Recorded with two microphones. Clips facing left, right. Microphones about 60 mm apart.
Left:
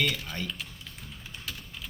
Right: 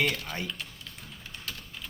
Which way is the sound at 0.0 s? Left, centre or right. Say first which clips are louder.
Right 1 dB; centre.